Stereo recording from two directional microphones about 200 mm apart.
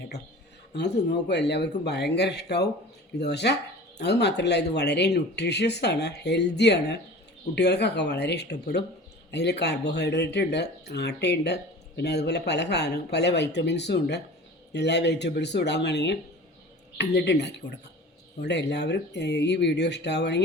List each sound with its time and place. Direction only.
0.7 s speech: 55° left (ahead or behind)